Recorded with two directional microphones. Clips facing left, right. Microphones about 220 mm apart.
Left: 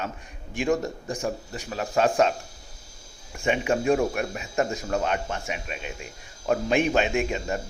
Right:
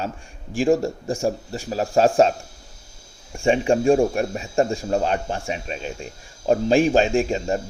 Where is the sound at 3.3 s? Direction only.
30° right (ahead or behind).